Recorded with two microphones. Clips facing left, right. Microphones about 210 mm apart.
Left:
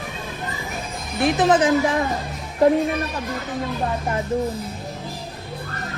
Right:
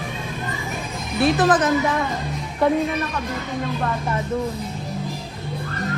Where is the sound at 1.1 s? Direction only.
20° left (ahead or behind).